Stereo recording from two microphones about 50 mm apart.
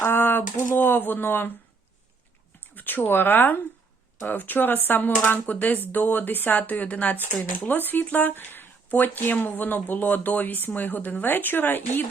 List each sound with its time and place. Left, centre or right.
0.0 s speech: left
2.7 s speech: left
7.7 s speech: left